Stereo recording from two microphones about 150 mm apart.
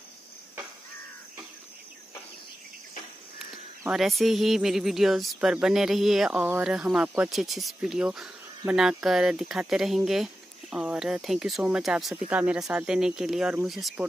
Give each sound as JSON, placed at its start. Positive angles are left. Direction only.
{"t": 3.9, "sound": "speech", "side_deg": 0}